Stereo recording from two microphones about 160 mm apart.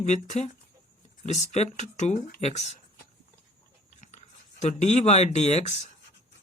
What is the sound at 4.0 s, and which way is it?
Speech, 45° left (ahead or behind).